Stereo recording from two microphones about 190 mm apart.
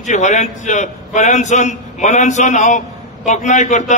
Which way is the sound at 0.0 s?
40° left (ahead or behind).